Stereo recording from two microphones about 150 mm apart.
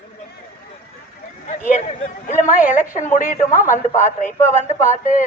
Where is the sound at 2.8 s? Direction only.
55° left (ahead or behind).